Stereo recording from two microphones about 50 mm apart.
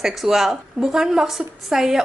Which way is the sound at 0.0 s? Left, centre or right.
Centre.